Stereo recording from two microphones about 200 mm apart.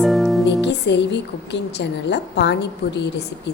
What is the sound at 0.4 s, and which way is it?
A woman's voice, 60° left (ahead or behind).